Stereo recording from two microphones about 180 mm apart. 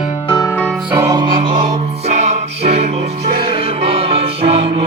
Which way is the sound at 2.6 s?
35° right (ahead or behind).